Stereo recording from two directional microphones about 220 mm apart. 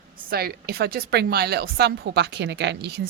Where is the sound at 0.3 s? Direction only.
45° right (ahead or behind).